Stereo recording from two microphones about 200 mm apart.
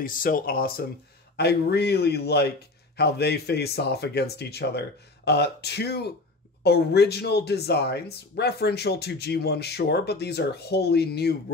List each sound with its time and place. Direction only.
0.0 s a man's voice: 45° left (ahead or behind)